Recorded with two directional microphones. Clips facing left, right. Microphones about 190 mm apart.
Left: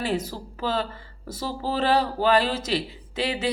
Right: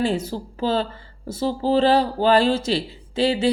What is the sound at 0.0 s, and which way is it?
Speech, 30° right (ahead or behind).